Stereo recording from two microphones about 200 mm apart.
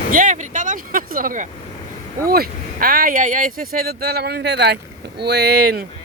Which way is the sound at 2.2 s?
50° right (ahead or behind).